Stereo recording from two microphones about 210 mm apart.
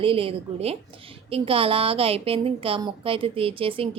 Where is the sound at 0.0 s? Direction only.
25° right (ahead or behind).